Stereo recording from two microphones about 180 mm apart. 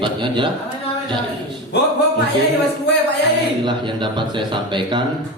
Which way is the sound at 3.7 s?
25° right (ahead or behind).